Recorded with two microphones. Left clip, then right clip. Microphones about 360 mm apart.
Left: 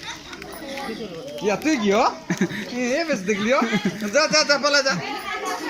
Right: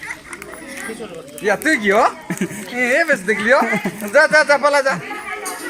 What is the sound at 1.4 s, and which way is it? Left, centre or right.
A man's voice, right.